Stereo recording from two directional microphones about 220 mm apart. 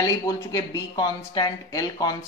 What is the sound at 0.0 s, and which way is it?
A woman's voice, 15° left (ahead or behind).